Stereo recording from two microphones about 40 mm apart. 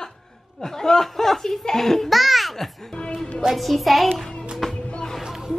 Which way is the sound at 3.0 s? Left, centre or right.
Centre.